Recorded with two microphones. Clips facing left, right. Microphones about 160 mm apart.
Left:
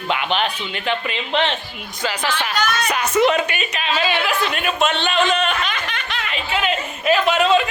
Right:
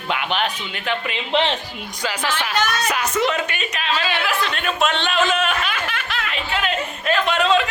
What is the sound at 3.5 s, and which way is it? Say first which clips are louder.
A woman's voice: left 2 dB; 5° left (ahead or behind).